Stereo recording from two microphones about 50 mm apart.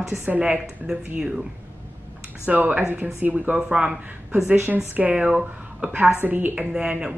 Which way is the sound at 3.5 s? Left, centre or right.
Centre.